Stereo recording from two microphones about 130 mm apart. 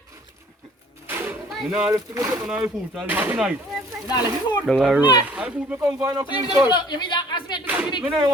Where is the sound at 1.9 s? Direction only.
25° right (ahead or behind).